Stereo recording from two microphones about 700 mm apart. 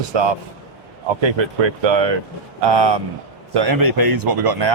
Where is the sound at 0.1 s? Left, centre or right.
Right.